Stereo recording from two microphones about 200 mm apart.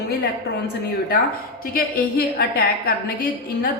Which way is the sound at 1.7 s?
50° left (ahead or behind).